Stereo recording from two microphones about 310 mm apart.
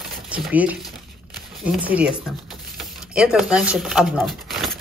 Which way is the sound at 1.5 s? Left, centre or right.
Centre.